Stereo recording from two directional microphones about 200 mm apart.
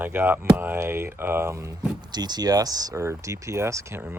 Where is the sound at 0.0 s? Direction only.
10° right (ahead or behind).